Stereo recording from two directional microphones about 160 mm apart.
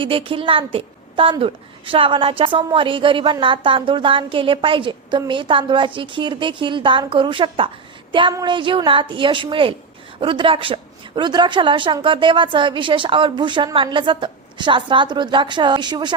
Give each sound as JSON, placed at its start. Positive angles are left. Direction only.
{"t": 0.0, "sound": "a woman's voice", "side_deg": -35}